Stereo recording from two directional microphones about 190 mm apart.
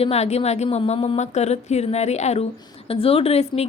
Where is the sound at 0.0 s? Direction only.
35° left (ahead or behind).